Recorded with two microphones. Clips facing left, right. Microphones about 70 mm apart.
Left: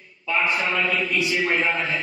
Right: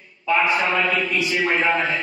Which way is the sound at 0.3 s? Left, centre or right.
Right.